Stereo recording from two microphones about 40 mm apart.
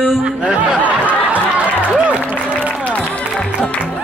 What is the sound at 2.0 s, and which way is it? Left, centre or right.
Music, right.